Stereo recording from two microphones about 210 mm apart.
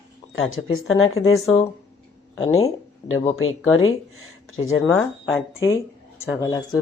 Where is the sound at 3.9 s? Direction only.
75° left (ahead or behind).